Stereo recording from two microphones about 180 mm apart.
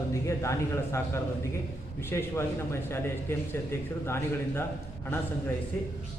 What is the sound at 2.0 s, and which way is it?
A man's voice, 15° left (ahead or behind).